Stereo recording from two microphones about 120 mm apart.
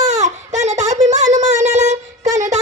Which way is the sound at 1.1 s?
75° right (ahead or behind).